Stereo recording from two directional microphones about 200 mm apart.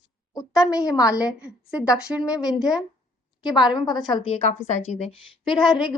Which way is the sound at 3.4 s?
20° left (ahead or behind).